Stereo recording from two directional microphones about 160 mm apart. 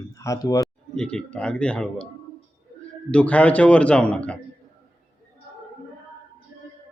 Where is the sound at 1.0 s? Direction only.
5° left (ahead or behind).